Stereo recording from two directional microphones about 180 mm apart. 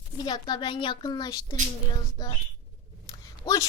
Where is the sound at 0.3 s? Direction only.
25° left (ahead or behind).